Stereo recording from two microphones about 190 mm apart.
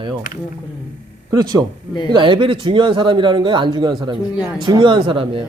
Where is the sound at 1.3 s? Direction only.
20° right (ahead or behind).